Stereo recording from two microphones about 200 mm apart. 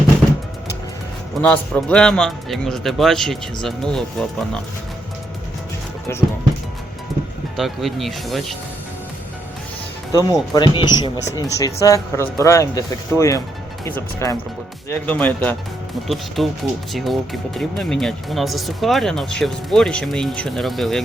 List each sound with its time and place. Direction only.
1.4 s speech: 5° left (ahead or behind)
6.1 s speech: 10° left (ahead or behind)
7.5 s speech: centre (ahead or behind)
10.1 s speech: 15° left (ahead or behind); by 21.0 s centre (ahead or behind)